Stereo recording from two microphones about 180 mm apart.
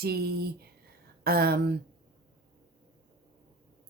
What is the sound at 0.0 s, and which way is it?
Speech, 60° right (ahead or behind).